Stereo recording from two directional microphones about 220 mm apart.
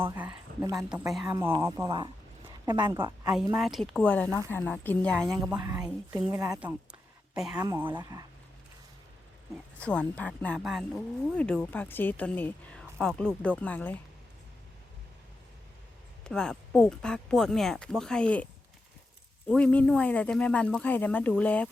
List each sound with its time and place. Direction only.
0.0 s a sound: 10° right (ahead or behind)
0.8 s a woman's voice: centre (ahead or behind)
5.5 s speech: 15° right (ahead or behind)
9.7 s a woman's voice: 5° left (ahead or behind)
16.2 s a woman's voice: 5° left (ahead or behind)
19.5 s a woman's voice: 5° left (ahead or behind)